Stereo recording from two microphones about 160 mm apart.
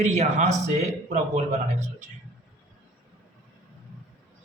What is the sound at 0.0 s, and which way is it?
Speech, 45° right (ahead or behind).